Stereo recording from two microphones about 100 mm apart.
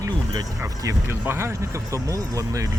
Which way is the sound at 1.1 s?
25° right (ahead or behind).